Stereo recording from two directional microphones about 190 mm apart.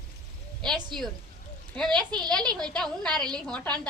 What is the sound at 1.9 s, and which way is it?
Speech, 20° right (ahead or behind).